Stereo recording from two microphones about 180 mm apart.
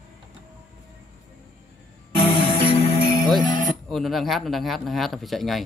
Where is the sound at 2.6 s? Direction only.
30° left (ahead or behind).